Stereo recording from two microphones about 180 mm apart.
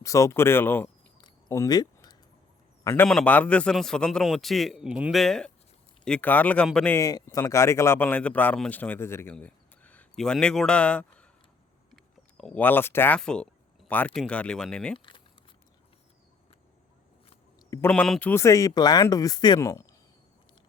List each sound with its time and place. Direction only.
0.0 s speech: 15° left (ahead or behind)
1.2 s a sound: 20° left (ahead or behind)
2.8 s a man's voice: 10° left (ahead or behind)
12.4 s a man's voice: 5° left (ahead or behind)
14.9 s a sound: 25° left (ahead or behind)
17.7 s speech: 10° left (ahead or behind)